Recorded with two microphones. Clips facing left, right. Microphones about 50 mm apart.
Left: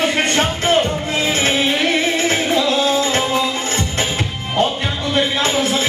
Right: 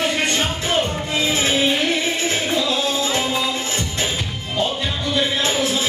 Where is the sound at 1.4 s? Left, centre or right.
Left.